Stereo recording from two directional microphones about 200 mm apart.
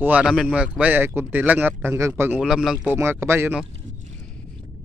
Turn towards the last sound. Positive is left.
turn(degrees=-10)  # may be behind; listen again after turning